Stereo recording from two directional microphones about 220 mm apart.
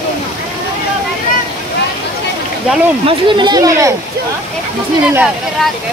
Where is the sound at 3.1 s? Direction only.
20° right (ahead or behind).